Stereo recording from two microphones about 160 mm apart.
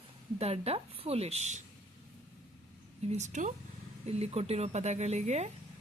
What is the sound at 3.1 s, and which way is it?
A woman's voice, 45° right (ahead or behind).